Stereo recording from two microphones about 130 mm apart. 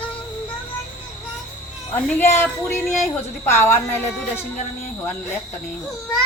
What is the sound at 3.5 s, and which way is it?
Speech, 20° left (ahead or behind).